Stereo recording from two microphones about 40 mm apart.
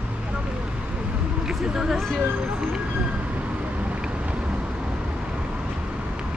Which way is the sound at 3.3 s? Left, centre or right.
Right.